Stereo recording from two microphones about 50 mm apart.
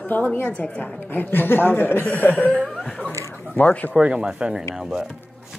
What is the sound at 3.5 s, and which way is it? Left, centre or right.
Speech, left.